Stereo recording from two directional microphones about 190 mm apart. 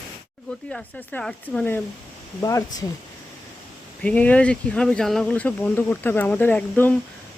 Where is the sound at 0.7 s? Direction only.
5° left (ahead or behind).